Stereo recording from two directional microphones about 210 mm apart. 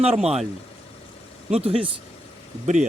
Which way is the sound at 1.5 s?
30° right (ahead or behind).